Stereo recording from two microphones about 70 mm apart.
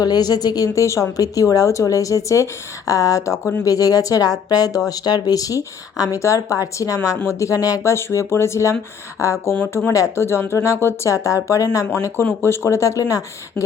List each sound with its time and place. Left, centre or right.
0.0 s speech: left
0.9 s speech: left
7.9 s speech: left
10.5 s speech: left
11.1 s speech: left
12.1 s speech: left
12.6 s speech: left